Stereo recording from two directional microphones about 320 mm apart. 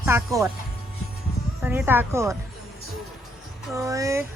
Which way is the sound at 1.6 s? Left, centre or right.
Centre.